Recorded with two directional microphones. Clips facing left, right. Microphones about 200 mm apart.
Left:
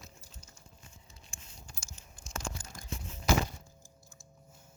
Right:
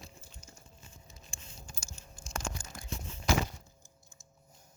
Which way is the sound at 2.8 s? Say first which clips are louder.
Right 3 dB; 45° left (ahead or behind).